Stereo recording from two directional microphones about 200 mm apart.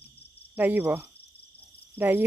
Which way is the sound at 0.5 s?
10° right (ahead or behind).